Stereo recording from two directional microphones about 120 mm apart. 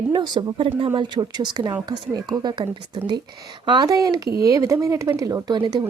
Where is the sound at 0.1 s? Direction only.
35° right (ahead or behind).